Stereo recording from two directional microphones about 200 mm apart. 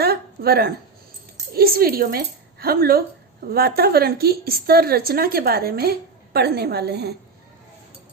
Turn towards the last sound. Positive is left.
turn(degrees=-55)  # may be behind; listen again after turning